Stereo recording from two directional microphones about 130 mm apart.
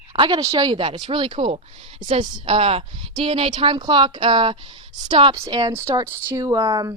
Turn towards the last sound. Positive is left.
turn(degrees=-30)  # may be behind; listen again after turning